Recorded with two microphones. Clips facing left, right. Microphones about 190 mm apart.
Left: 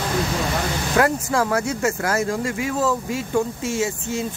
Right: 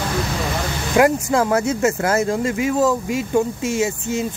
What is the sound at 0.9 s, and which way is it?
Speech, 15° right (ahead or behind).